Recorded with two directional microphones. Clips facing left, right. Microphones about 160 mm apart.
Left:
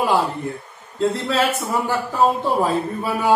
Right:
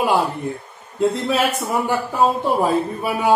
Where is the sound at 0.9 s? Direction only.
15° right (ahead or behind).